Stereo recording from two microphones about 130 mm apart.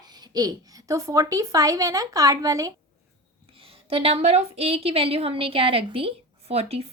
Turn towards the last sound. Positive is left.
turn(degrees=-50)  # may be behind; listen again after turning